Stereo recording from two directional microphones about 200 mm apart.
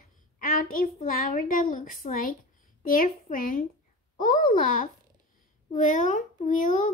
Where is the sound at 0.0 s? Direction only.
45° left (ahead or behind).